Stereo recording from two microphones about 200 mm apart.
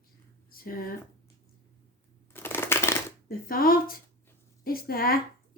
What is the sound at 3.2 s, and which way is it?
Speech, 45° left (ahead or behind).